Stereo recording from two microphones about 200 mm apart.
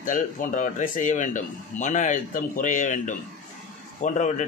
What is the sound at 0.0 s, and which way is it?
Speech, 40° left (ahead or behind).